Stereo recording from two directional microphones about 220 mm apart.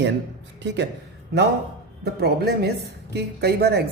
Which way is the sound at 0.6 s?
55° right (ahead or behind).